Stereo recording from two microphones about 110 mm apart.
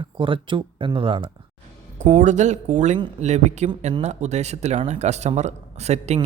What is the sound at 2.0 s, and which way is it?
Speech, 90° right.